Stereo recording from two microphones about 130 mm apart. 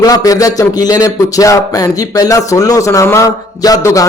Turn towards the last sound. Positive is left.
turn(degrees=25)  # may be behind; listen again after turning